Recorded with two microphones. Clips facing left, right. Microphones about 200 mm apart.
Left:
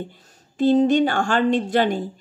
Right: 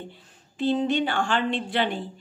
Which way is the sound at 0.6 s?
45° left (ahead or behind).